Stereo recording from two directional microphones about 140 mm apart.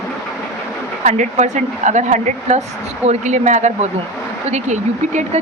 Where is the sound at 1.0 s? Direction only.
60° right (ahead or behind).